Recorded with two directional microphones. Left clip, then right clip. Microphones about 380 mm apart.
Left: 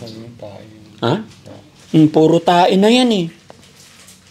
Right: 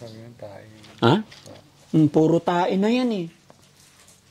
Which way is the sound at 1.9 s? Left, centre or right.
Centre.